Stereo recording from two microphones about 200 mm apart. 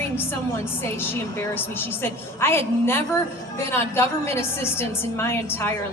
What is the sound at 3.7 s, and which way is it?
A woman's voice, 10° left (ahead or behind).